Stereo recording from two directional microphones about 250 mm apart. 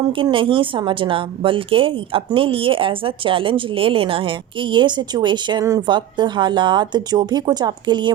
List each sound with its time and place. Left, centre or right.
0.1 s speech: centre